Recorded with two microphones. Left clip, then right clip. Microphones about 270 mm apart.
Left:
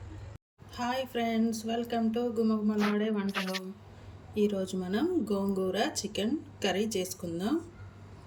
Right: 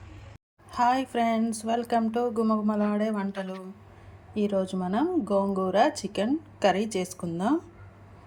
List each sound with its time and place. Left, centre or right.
0.7 s speech: centre
3.2 s speech: centre